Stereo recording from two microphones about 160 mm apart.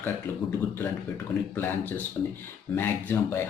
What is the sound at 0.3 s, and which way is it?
Speech, 15° left (ahead or behind).